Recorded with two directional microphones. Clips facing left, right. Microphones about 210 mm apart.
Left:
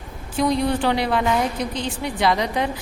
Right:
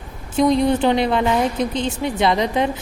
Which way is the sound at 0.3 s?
20° right (ahead or behind).